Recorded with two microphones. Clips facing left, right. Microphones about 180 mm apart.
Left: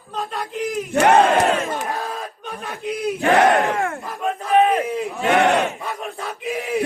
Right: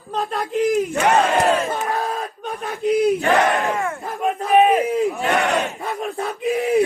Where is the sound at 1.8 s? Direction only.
40° right (ahead or behind).